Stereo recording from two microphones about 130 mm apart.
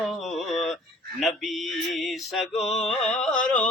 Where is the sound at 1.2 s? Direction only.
Centre (ahead or behind).